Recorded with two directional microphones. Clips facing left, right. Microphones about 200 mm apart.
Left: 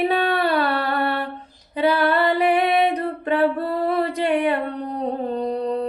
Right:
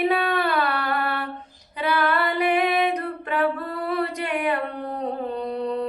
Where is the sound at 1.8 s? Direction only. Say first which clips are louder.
Left 5 dB; 30° left (ahead or behind).